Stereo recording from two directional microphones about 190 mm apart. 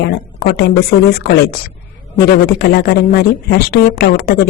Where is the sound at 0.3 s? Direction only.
55° left (ahead or behind).